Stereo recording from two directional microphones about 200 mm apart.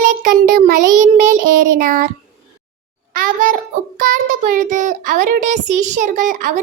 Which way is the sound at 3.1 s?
45° right (ahead or behind).